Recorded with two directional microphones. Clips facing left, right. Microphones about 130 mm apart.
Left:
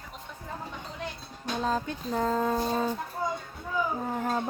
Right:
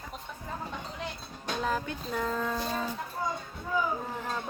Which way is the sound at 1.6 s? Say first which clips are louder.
Left 2 dB; 25° left (ahead or behind).